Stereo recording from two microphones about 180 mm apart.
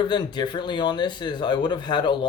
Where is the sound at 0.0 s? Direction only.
25° left (ahead or behind).